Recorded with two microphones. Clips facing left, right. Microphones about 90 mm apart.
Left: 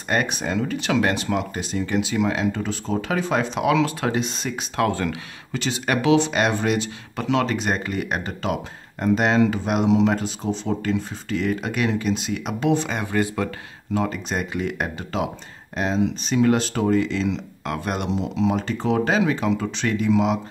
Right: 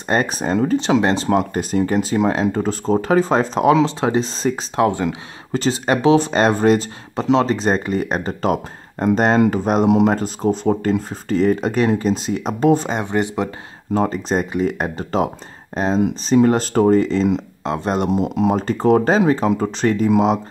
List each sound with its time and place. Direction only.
0.1 s speech: 35° right (ahead or behind)
4.8 s speech: 20° right (ahead or behind)
5.5 s speech: 35° right (ahead or behind)
7.2 s speech: 30° right (ahead or behind)
9.8 s speech: 55° right (ahead or behind)
10.1 s speech: 45° right (ahead or behind)
12.9 s speech: 25° right (ahead or behind)
13.9 s speech: 35° right (ahead or behind)
17.6 s speech: 30° right (ahead or behind)
18.1 s speech: 50° right (ahead or behind)